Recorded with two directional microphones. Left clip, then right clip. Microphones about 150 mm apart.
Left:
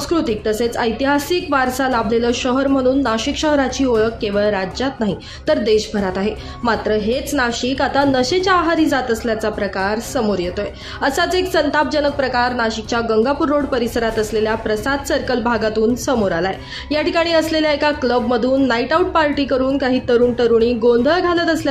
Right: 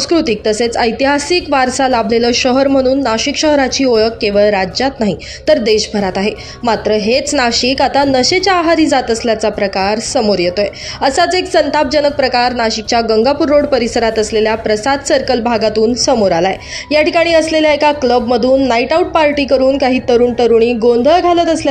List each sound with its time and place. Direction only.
0.1 s a woman's voice: 15° right (ahead or behind)
15.7 s speech: 15° left (ahead or behind)
16.1 s a woman's voice: 10° right (ahead or behind)